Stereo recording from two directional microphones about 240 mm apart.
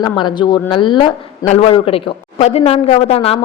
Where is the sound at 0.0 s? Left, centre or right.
Centre.